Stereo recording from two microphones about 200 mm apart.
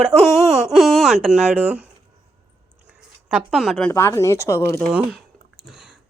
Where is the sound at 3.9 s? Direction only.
15° left (ahead or behind).